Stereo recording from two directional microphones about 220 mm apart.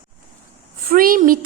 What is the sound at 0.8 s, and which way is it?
Speech, 40° right (ahead or behind).